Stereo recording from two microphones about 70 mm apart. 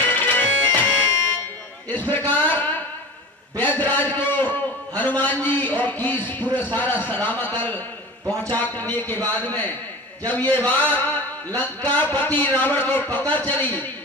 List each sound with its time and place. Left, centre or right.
0.0 s music: left
1.9 s a sound: left
3.6 s a man's voice: left